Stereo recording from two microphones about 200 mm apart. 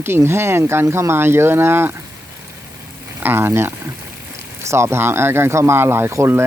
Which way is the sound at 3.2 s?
10° right (ahead or behind).